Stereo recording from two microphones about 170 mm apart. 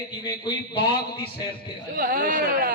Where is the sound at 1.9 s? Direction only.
60° right (ahead or behind).